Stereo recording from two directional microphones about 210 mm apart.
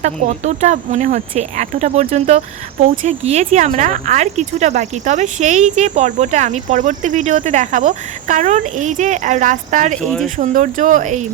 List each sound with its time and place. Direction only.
0.0 s speech: 35° right (ahead or behind)